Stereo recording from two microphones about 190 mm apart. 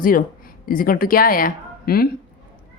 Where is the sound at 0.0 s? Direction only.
45° left (ahead or behind).